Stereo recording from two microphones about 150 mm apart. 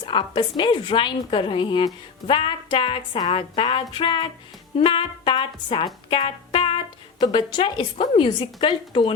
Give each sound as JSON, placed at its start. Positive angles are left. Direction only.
{"t": 0.0, "sound": "a woman's voice", "side_deg": 35}